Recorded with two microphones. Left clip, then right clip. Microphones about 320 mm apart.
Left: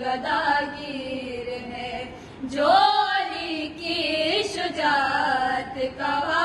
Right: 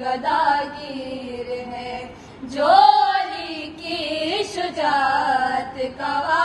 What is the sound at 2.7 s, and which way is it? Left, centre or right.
Music, right.